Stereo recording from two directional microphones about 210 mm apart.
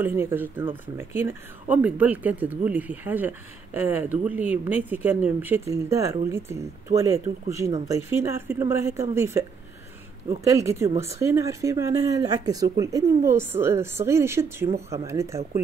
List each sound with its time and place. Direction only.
0.0 s speech: 10° right (ahead or behind)